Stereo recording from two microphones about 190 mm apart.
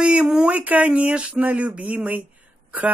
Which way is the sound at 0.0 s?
5° right (ahead or behind).